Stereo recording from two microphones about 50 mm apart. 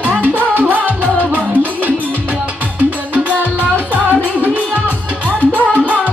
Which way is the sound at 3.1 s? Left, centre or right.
Right.